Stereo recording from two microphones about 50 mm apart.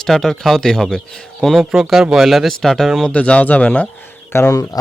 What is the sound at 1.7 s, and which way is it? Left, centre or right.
Speech, centre.